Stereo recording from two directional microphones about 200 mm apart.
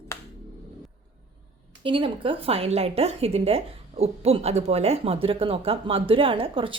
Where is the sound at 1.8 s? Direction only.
25° right (ahead or behind).